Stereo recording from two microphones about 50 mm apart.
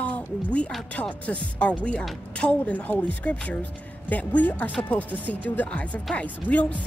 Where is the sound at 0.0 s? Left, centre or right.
Left.